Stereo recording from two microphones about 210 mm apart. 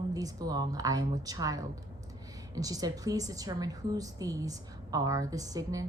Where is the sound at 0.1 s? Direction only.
15° right (ahead or behind).